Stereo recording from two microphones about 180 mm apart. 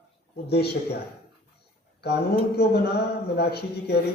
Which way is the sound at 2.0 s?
65° left (ahead or behind).